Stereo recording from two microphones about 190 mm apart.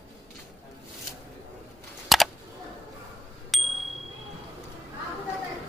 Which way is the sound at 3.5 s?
Centre (ahead or behind).